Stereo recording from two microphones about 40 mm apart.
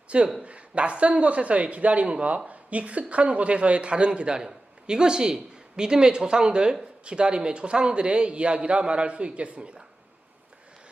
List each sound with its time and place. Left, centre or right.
0.1 s a man's voice: right